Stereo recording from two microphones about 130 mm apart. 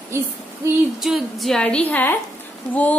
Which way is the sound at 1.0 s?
Centre (ahead or behind).